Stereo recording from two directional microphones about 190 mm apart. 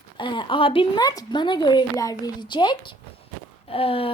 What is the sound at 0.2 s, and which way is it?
A woman's voice, 25° left (ahead or behind).